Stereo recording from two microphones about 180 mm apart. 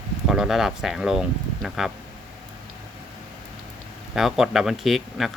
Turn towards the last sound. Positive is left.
turn(degrees=0)  # may be behind; listen again after turning